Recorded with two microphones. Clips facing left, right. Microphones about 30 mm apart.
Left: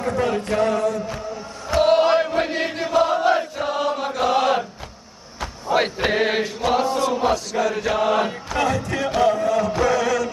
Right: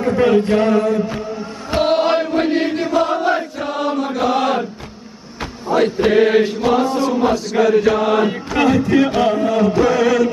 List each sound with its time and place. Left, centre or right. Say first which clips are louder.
0.0 s chant: right 8 dB; right; by 4.6 s centre
5.9 s mantra: right 7 dB; centre
6.6 s chant: right 4 dB; centre
8.5 s chant: right 8 dB; right